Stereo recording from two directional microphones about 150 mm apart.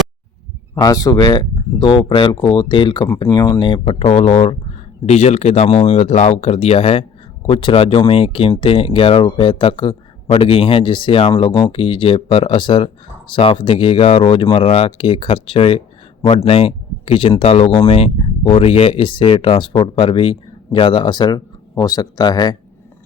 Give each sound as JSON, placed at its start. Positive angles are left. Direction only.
{"t": 0.8, "sound": "speech", "side_deg": 25}